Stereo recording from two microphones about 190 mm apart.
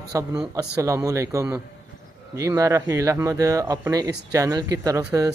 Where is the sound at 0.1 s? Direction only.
15° right (ahead or behind).